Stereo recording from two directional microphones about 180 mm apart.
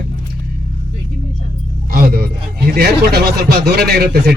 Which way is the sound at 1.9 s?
60° right (ahead or behind).